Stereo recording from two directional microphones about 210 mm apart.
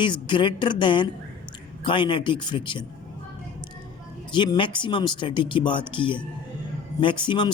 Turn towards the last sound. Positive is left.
turn(degrees=20)  # may be behind; listen again after turning